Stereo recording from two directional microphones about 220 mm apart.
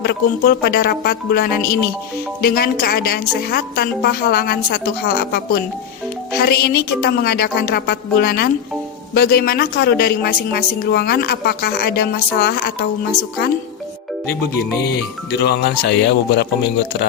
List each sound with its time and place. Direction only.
0.0 s a woman's voice: 45° left (ahead or behind)
14.8 s a woman's voice: 45° left (ahead or behind)